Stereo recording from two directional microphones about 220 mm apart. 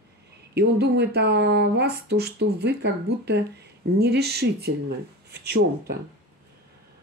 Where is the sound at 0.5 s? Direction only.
45° right (ahead or behind).